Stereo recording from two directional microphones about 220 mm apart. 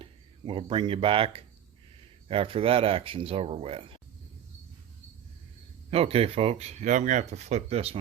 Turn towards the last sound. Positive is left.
turn(degrees=-30)  # may be behind; listen again after turning